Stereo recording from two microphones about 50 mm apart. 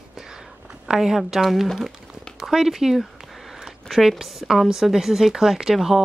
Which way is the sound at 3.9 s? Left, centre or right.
Centre.